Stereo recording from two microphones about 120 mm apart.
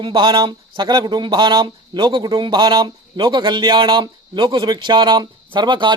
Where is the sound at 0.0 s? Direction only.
40° right (ahead or behind).